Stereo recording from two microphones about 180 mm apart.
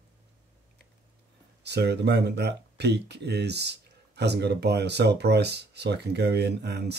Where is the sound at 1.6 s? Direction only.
70° right (ahead or behind).